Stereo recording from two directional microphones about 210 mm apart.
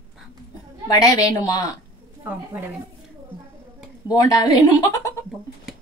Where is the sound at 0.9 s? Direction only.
15° left (ahead or behind).